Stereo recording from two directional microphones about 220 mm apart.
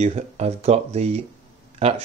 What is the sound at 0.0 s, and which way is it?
Speech, 30° right (ahead or behind).